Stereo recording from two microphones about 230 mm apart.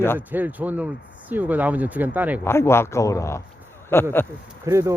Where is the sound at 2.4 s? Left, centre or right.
Centre.